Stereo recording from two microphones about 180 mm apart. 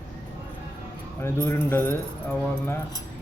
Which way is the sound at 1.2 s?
15° left (ahead or behind).